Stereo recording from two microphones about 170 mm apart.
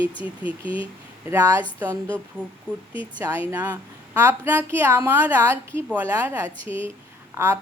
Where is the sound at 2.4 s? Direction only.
5° left (ahead or behind).